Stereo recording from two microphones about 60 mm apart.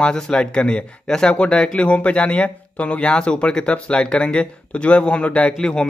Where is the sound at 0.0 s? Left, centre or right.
Centre.